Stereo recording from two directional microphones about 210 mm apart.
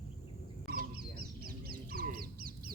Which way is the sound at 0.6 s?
45° right (ahead or behind).